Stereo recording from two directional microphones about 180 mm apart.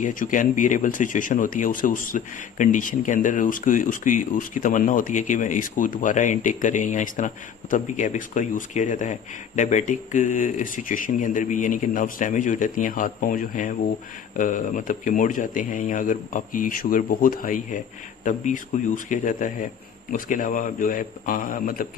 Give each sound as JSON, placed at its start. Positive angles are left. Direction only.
{"t": 0.0, "sound": "speech", "side_deg": 50}